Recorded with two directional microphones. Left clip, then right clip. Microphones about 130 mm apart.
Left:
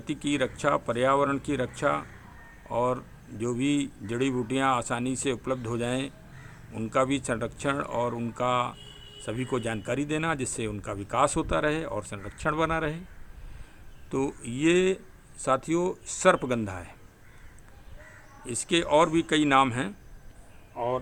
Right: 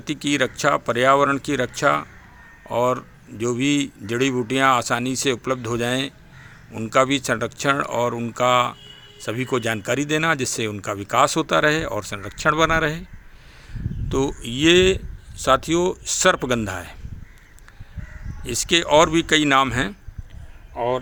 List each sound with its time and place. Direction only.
0.0 s speech: 25° right (ahead or behind)
14.1 s speech: 25° right (ahead or behind)
18.4 s speech: 30° right (ahead or behind)
20.7 s speech: 75° right (ahead or behind)